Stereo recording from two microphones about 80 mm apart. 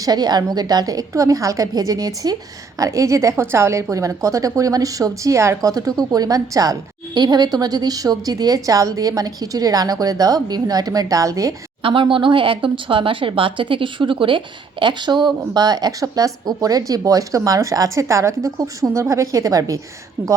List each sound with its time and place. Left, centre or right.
0.0 s a woman's voice: right
11.8 s speech: right
20.2 s a woman's voice: right